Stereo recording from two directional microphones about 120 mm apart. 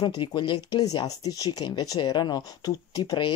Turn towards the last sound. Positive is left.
turn(degrees=35)  # may be behind; listen again after turning